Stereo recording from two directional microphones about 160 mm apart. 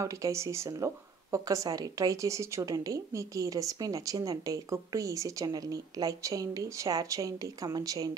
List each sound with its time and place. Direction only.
0.0 s speech: 20° right (ahead or behind)